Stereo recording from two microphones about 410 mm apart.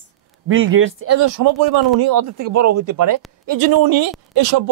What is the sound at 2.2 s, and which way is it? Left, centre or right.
A man's voice, right.